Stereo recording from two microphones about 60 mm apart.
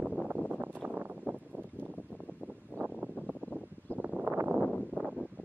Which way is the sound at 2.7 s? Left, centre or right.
Right.